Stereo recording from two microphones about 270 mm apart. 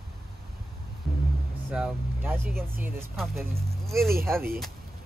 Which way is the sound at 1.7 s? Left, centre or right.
Centre.